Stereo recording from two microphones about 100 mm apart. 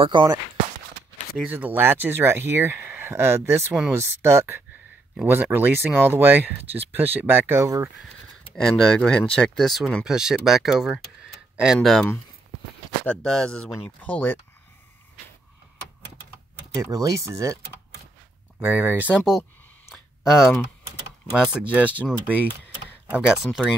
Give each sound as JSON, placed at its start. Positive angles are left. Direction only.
{"t": 0.0, "sound": "speech", "side_deg": -55}
{"t": 1.4, "sound": "speech", "side_deg": -15}
{"t": 8.5, "sound": "speech", "side_deg": 5}
{"t": 16.7, "sound": "speech", "side_deg": -35}
{"t": 18.6, "sound": "speech", "side_deg": -20}
{"t": 19.9, "sound": "a sound", "side_deg": -5}
{"t": 21.4, "sound": "speech", "side_deg": -10}
{"t": 23.3, "sound": "speech", "side_deg": -5}